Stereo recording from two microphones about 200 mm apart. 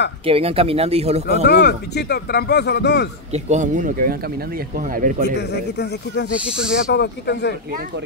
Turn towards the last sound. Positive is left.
turn(degrees=55)  # may be behind; listen again after turning